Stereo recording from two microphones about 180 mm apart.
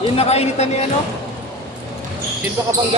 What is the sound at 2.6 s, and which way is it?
Speech, 15° right (ahead or behind).